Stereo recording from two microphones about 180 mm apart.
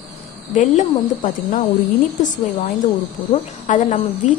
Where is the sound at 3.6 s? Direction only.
40° left (ahead or behind).